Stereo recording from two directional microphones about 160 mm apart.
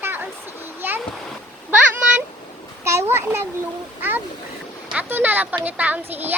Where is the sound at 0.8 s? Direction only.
10° right (ahead or behind).